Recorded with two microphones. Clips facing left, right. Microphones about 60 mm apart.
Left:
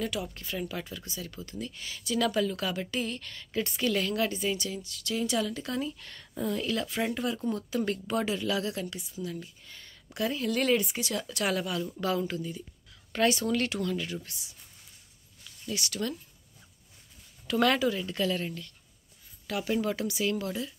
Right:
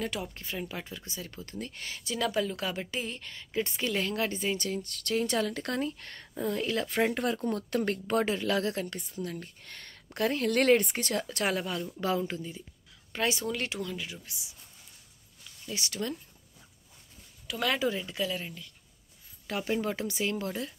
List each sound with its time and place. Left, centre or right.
0.0 s speech: right
7.4 s speech: right
9.6 s speech: right
10.1 s speech: right; by 14.5 s centre
15.7 s speech: right
17.5 s speech: centre
17.7 s speech: right
18.0 s speech: centre
19.4 s speech: right